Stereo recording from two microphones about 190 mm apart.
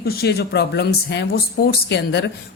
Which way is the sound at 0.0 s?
55° left (ahead or behind).